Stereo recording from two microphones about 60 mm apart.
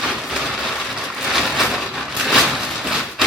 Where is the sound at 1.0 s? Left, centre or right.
Centre.